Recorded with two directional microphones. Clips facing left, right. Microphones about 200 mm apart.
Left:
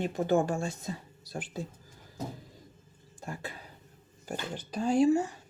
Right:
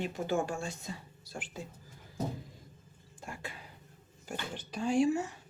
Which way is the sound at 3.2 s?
35° left (ahead or behind).